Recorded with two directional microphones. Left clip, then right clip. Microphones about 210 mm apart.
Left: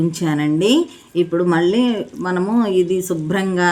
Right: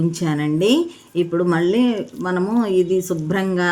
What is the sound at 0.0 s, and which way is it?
Speech, 15° left (ahead or behind).